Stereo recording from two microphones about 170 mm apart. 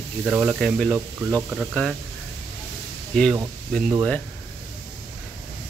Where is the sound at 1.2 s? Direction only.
15° right (ahead or behind).